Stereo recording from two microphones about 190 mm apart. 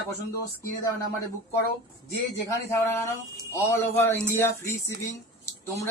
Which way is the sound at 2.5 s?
15° left (ahead or behind).